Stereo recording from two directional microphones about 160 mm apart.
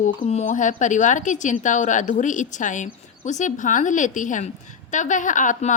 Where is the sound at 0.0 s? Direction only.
45° left (ahead or behind).